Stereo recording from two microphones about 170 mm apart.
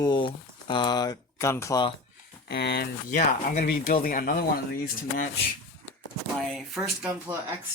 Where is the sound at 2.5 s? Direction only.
70° left (ahead or behind).